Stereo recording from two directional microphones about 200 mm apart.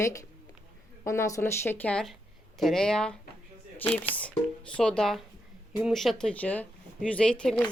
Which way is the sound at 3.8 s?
30° left (ahead or behind).